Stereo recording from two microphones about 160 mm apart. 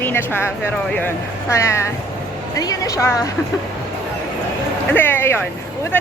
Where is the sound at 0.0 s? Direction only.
15° left (ahead or behind).